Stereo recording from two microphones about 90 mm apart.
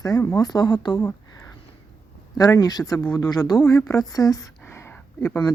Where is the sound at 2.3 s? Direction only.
40° left (ahead or behind).